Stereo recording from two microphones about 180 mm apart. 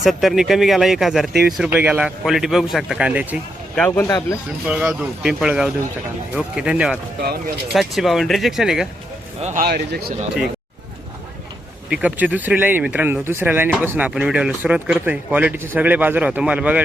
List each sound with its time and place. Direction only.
0.0 s speech: centre (ahead or behind)
3.8 s speech: 10° left (ahead or behind)
4.6 s speech: 5° right (ahead or behind)
7.2 s speech: 60° right (ahead or behind)
7.7 s speech: centre (ahead or behind)
9.4 s speech: 40° right (ahead or behind)
9.6 s speech: 60° right (ahead or behind)
11.9 s speech: 5° right (ahead or behind)